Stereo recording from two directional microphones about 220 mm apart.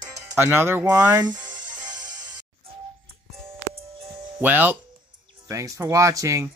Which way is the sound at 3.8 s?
25° right (ahead or behind).